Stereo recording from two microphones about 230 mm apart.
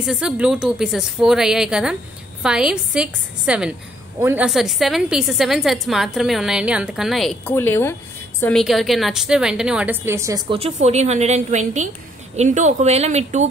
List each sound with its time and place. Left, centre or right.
0.0 s a woman's voice: centre
7.5 s a woman's voice: centre; by 13.5 s right